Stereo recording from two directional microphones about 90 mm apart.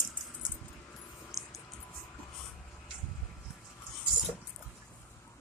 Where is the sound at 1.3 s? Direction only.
Centre (ahead or behind).